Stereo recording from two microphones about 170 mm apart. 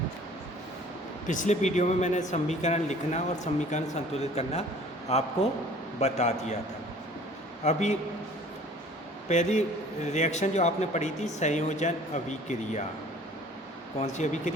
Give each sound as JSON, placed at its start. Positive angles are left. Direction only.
{"t": 1.3, "sound": "a man's voice", "side_deg": 45}
{"t": 7.6, "sound": "speech", "side_deg": 45}
{"t": 9.3, "sound": "speech", "side_deg": 45}
{"t": 14.0, "sound": "speech", "side_deg": 45}